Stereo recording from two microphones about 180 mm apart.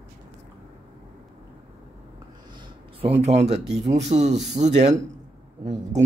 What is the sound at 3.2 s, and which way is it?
Speech, 35° right (ahead or behind).